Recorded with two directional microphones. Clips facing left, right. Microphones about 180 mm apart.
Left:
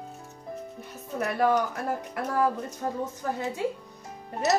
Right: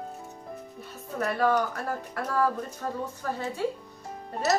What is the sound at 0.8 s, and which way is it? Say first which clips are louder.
Speech: right 1 dB; 15° left (ahead or behind).